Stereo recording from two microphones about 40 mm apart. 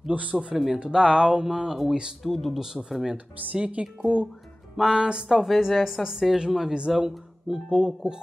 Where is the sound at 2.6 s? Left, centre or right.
Centre.